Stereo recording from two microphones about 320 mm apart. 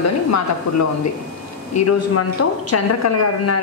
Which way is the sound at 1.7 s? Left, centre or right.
Left.